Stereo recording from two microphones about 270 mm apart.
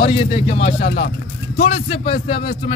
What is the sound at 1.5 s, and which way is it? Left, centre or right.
A man's voice, left.